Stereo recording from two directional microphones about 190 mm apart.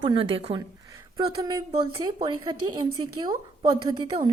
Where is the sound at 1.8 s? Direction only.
20° right (ahead or behind).